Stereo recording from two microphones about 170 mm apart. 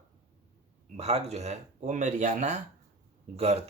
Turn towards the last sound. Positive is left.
turn(degrees=-40)  # may be behind; listen again after turning